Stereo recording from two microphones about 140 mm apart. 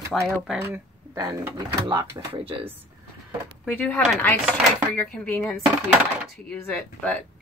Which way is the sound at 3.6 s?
10° left (ahead or behind).